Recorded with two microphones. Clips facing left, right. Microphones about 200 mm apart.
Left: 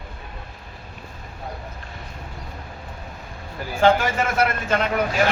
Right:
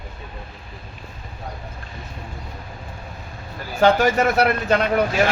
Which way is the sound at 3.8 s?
40° right (ahead or behind).